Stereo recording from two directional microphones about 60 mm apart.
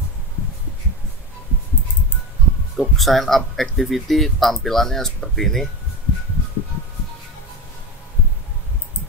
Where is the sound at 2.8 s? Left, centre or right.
Centre.